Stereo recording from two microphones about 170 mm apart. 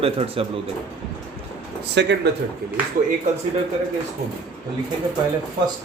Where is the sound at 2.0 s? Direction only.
90° right.